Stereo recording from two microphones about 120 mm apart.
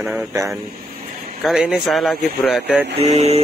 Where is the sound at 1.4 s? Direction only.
5° right (ahead or behind).